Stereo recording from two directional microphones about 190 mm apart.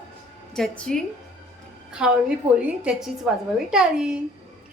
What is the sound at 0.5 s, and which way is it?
A woman's voice, 5° left (ahead or behind).